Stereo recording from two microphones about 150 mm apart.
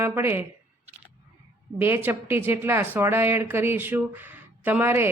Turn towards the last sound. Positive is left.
turn(degrees=-15)  # may be behind; listen again after turning